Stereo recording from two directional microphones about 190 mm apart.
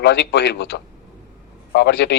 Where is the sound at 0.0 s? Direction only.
65° left (ahead or behind).